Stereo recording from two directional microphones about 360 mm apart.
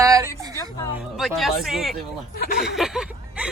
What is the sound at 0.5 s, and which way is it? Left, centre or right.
Speech, centre.